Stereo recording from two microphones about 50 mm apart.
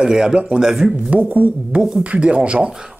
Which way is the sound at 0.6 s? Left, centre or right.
Centre.